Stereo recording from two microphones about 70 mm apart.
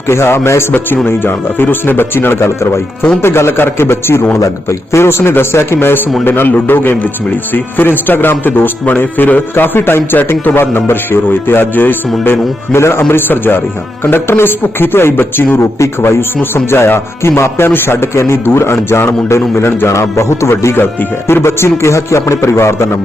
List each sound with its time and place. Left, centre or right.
0.1 s speech: left
16.6 s speech: left
20.7 s speech: left